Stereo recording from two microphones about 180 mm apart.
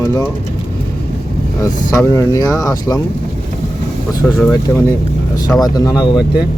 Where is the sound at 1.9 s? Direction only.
15° left (ahead or behind).